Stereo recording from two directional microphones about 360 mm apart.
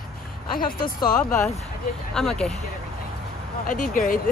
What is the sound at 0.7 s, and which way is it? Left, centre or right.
Speech, left.